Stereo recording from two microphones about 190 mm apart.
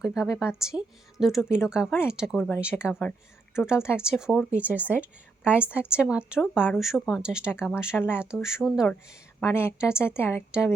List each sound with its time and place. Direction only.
0.0 s a woman's voice: centre (ahead or behind)
3.8 s a woman's voice: 15° left (ahead or behind)
4.0 s a woman's voice: 5° right (ahead or behind)
9.4 s a woman's voice: 15° left (ahead or behind)